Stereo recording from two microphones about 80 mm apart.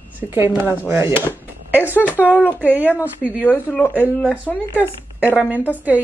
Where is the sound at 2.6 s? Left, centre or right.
Right.